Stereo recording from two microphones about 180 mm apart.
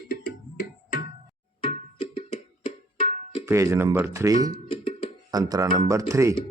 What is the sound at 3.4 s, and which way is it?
Speech, 15° right (ahead or behind).